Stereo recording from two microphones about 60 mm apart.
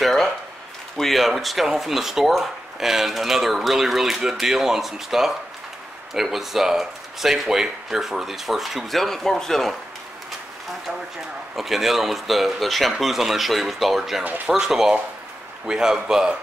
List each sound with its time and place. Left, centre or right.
0.0 s a sound: centre
0.9 s speech: centre
11.5 s speech: centre
14.2 s speech: right
14.5 s a man's voice: centre